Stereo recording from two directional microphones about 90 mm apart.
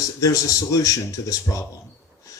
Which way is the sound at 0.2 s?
40° left (ahead or behind).